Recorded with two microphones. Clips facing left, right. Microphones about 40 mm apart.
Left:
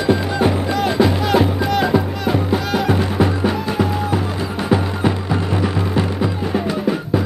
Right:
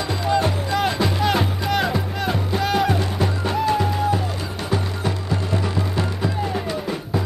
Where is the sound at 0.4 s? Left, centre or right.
Centre.